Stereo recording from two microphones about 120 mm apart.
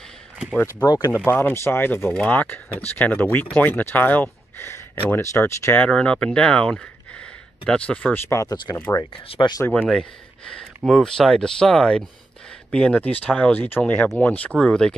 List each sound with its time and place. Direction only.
0.8 s speech: 30° left (ahead or behind)
1.1 s speech: 20° left (ahead or behind)
8.3 s speech: 30° left (ahead or behind)
9.1 s speech: 50° left (ahead or behind)
9.7 s speech: 5° left (ahead or behind)